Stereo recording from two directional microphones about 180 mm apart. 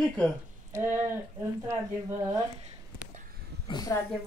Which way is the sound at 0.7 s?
10° right (ahead or behind).